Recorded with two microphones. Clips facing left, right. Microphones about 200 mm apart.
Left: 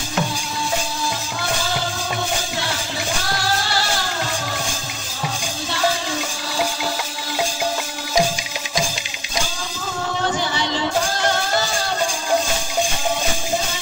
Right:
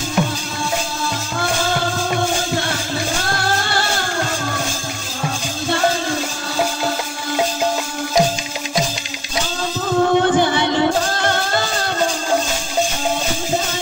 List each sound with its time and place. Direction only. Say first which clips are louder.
3.3 s music: right 2 dB; 55° right (ahead or behind)
10.0 s music: right 7 dB; 55° right (ahead or behind)